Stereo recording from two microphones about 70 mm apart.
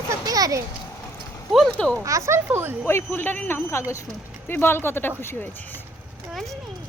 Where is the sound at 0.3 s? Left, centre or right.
Right.